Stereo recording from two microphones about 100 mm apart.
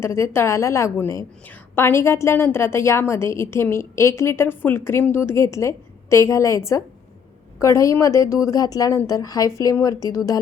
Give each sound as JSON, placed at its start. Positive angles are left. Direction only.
{"t": 0.0, "sound": "a woman's voice", "side_deg": 25}